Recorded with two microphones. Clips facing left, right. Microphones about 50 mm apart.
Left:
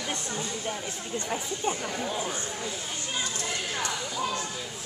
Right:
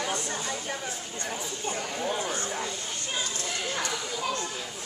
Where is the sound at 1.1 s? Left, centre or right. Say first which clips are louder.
Left 7 dB; centre.